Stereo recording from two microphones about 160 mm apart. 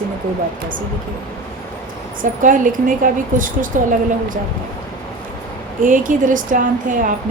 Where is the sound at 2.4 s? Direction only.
55° right (ahead or behind).